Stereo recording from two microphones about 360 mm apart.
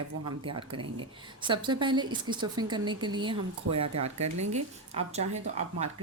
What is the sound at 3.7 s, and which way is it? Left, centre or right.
Speech, right.